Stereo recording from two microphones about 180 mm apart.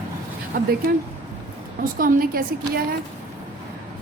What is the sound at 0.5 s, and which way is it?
Speech, 55° right (ahead or behind).